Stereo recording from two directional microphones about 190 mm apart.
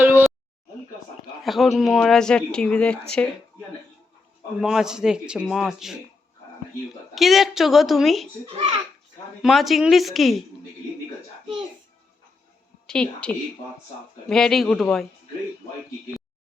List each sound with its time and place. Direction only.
0.0 s a sound: 10° right (ahead or behind)
1.4 s speech: centre (ahead or behind)
4.6 s speech: 5° right (ahead or behind)
7.2 s speech: centre (ahead or behind)
8.4 s a child's voice: 30° right (ahead or behind)
9.4 s speech: centre (ahead or behind)
12.9 s speech: 5° left (ahead or behind)